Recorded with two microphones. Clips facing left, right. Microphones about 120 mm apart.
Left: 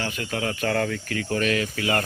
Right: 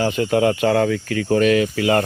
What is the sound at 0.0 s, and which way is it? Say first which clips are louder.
Speech: right 11 dB; 25° right (ahead or behind).